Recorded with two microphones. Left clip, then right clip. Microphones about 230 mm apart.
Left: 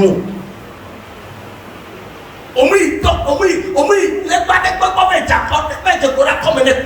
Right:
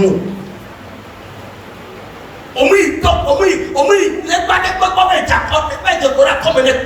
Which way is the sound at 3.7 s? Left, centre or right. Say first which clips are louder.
Even; left.